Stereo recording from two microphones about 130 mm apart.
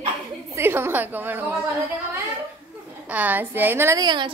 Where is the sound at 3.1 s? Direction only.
10° right (ahead or behind).